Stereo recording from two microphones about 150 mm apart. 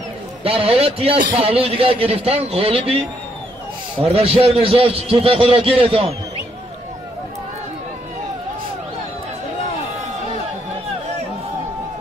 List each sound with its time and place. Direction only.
0.4 s a man's voice: 40° right (ahead or behind)
4.0 s a man's voice: 40° right (ahead or behind)